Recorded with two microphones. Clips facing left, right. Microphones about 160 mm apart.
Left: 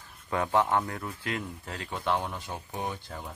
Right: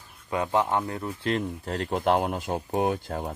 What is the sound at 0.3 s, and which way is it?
Speech, 20° right (ahead or behind).